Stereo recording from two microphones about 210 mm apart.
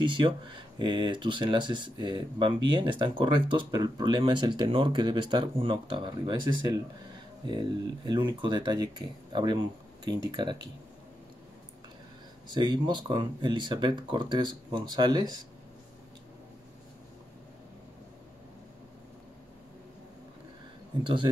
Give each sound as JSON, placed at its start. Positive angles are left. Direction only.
{"t": 0.0, "sound": "speech", "side_deg": -25}
{"t": 12.4, "sound": "speech", "side_deg": -20}
{"t": 21.0, "sound": "speech", "side_deg": -20}